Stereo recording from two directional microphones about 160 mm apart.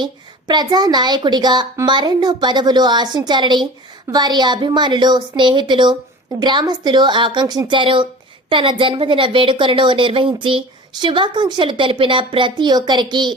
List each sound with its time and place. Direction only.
0.0 s a woman's voice: 25° right (ahead or behind)